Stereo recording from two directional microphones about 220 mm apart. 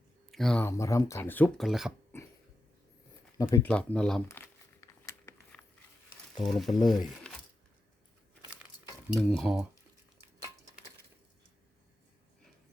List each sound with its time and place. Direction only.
0.3 s speech: centre (ahead or behind)
2.1 s a sound: 10° left (ahead or behind)
3.3 s crumpling: 10° left (ahead or behind)
6.4 s speech: centre (ahead or behind)
9.1 s speech: centre (ahead or behind)